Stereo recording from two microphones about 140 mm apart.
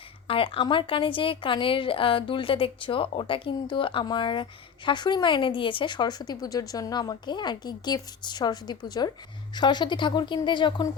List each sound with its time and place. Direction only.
0.3 s speech: 40° left (ahead or behind)